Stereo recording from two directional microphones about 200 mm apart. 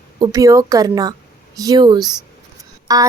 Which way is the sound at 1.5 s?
20° right (ahead or behind).